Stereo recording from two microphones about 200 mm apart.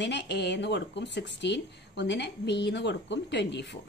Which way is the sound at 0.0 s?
60° left (ahead or behind).